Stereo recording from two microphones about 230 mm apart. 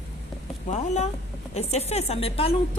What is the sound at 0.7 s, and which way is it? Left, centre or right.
A woman's voice, left.